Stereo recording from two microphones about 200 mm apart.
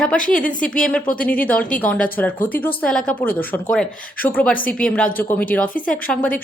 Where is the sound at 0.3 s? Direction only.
40° left (ahead or behind).